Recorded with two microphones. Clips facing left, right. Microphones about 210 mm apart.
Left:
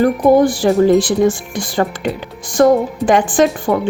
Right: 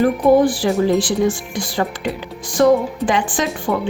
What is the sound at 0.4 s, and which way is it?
Speech, 45° left (ahead or behind).